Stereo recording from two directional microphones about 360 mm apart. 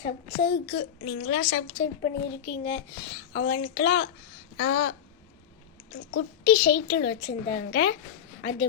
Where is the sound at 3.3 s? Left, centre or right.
Left.